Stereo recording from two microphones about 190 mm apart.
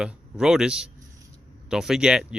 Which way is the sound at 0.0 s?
5° right (ahead or behind).